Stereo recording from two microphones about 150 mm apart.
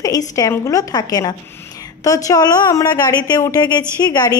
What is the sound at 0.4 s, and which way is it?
A woman's voice, 20° left (ahead or behind).